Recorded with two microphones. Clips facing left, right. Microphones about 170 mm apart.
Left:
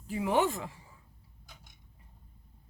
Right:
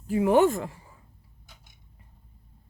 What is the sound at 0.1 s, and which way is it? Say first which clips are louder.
Speech: right 8 dB; 50° right (ahead or behind).